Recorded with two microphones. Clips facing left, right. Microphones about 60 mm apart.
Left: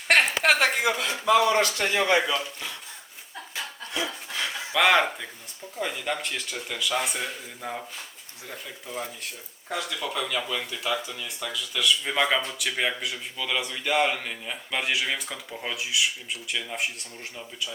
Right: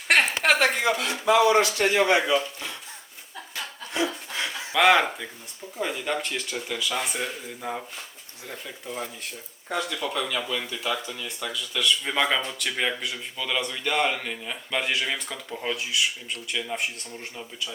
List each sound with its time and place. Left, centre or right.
0.1 s a sound: centre
0.6 s speech: centre
1.3 s speech: right
4.7 s speech: centre